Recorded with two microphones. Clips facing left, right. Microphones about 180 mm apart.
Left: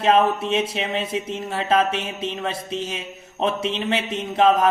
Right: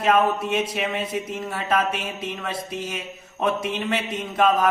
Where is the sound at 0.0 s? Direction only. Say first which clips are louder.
Left 2 dB; 25° left (ahead or behind).